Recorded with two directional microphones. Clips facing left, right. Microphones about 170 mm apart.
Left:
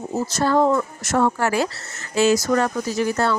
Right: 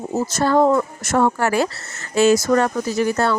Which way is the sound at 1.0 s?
55° right (ahead or behind).